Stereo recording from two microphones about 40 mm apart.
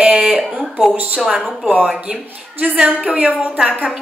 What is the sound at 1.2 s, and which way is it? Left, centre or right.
Speech, centre.